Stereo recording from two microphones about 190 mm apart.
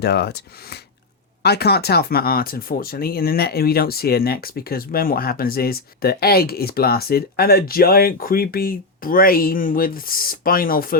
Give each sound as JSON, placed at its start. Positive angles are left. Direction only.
{"t": 0.0, "sound": "speech", "side_deg": 60}